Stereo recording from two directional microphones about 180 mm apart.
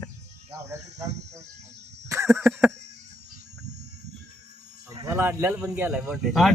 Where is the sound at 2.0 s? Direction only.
15° right (ahead or behind).